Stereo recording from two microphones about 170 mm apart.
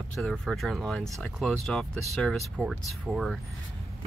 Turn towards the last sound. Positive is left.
turn(degrees=0)  # may be behind; listen again after turning